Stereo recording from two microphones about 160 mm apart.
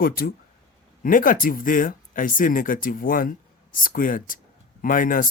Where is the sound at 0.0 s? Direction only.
65° left (ahead or behind).